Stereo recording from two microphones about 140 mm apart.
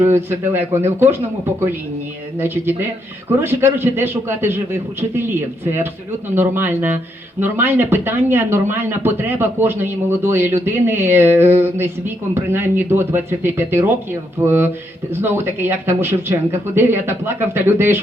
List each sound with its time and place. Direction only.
0.0 s speech: 15° right (ahead or behind)
3.4 s speech: 15° right (ahead or behind)